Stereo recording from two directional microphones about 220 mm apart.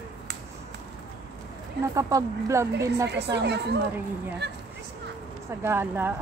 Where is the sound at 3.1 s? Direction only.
50° right (ahead or behind).